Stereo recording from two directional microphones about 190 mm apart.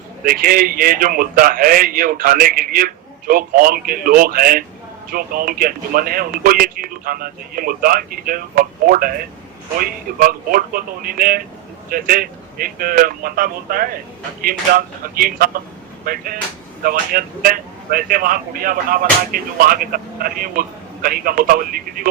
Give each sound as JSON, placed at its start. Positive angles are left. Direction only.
{"t": 0.3, "sound": "speech", "side_deg": -50}
{"t": 15.1, "sound": "speech", "side_deg": -50}